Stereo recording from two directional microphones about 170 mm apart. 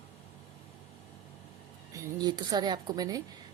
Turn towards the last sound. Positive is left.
turn(degrees=-20)  # may be behind; listen again after turning